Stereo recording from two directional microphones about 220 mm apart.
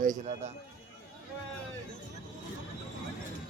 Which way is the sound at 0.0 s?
35° right (ahead or behind).